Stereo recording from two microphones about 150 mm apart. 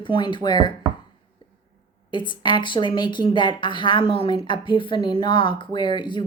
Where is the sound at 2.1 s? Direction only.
30° left (ahead or behind).